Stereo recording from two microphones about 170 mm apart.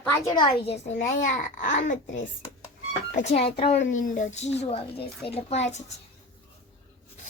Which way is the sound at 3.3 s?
35° left (ahead or behind).